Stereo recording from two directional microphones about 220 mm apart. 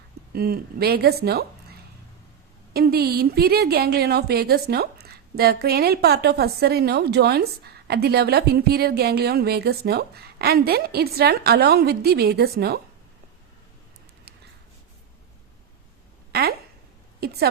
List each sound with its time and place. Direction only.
0.3 s a woman's voice: 45° right (ahead or behind)
2.7 s a woman's voice: 45° right (ahead or behind)
16.3 s a woman's voice: 45° right (ahead or behind)